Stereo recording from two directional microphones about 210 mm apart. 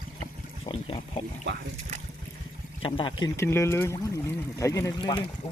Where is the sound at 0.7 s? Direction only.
25° left (ahead or behind).